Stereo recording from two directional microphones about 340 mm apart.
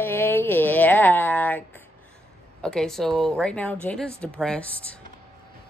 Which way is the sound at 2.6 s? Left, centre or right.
Centre.